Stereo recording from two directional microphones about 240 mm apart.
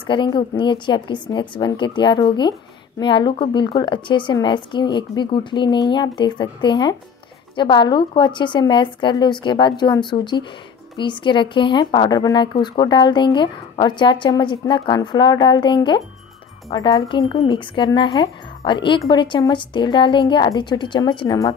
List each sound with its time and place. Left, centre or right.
0.0 s speech: centre